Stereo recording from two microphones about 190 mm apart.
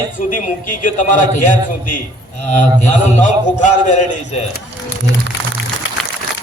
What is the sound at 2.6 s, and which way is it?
Speech, 40° left (ahead or behind).